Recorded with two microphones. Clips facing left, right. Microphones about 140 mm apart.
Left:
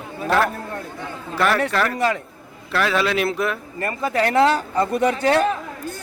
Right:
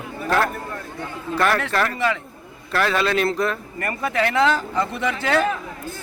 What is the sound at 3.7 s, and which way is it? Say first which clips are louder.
Speech: left 1 dB; 25° left (ahead or behind).